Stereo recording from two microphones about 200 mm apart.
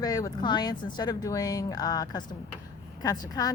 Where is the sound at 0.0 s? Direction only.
20° left (ahead or behind).